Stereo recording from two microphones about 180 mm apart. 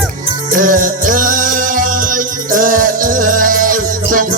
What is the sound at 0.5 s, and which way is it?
Music, 50° right (ahead or behind).